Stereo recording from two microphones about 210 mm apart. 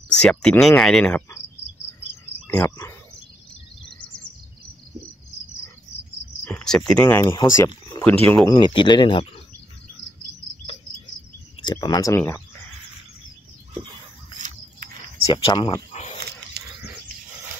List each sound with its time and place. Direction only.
0.2 s speech: 5° left (ahead or behind)
2.4 s speech: 10° left (ahead or behind)
6.4 s speech: 5° left (ahead or behind)
7.2 s speech: 15° left (ahead or behind)
8.5 s speech: 20° left (ahead or behind)
11.6 s speech: 20° left (ahead or behind)
14.4 s a sound: 40° right (ahead or behind)
15.2 s speech: 25° left (ahead or behind)
15.9 s wild animals: 35° left (ahead or behind)